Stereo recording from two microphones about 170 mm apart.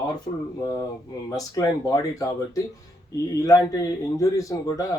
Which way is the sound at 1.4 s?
20° left (ahead or behind).